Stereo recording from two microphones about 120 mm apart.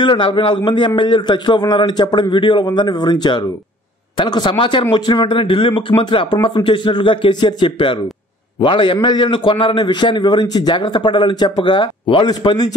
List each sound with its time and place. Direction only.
0.0 s a man's voice: 40° left (ahead or behind)